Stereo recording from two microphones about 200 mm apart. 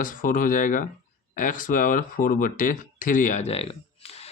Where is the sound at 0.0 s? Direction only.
45° left (ahead or behind).